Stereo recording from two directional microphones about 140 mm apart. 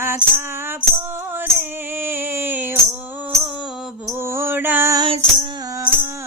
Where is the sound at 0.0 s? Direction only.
15° right (ahead or behind).